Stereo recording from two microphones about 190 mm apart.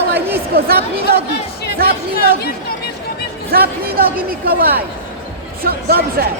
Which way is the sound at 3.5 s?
55° right (ahead or behind).